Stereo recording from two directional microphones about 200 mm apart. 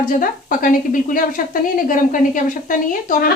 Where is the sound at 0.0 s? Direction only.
45° left (ahead or behind).